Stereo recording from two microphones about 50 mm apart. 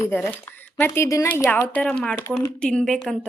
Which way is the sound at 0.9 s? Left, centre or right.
Left.